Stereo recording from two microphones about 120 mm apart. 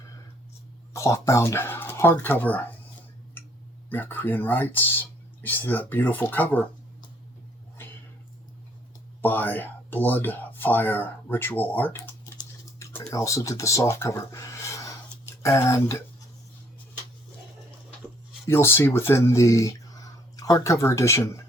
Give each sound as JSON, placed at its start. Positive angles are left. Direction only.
{"t": 0.9, "sound": "speech", "side_deg": 25}
{"t": 3.8, "sound": "speech", "side_deg": 15}
{"t": 7.8, "sound": "a sound", "side_deg": 20}
{"t": 9.2, "sound": "speech", "side_deg": 15}
{"t": 18.4, "sound": "speech", "side_deg": 20}